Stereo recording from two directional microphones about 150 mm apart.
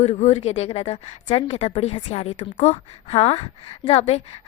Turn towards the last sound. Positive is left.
turn(degrees=45)  # may be behind; listen again after turning